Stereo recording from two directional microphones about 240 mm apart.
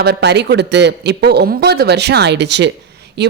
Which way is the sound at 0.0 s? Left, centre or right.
Right.